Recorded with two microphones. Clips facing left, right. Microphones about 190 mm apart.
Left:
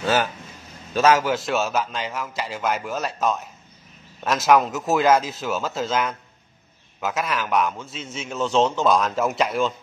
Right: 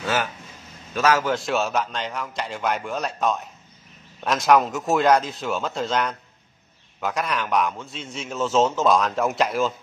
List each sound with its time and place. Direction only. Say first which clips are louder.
0.0 s a man's voice: left 3 dB; 30° left (ahead or behind)
1.2 s a man's voice: even; centre (ahead or behind)